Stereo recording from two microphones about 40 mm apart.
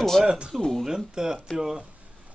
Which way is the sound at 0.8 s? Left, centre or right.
Centre.